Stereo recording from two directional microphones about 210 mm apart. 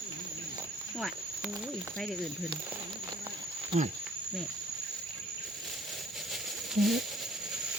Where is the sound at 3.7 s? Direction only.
30° right (ahead or behind).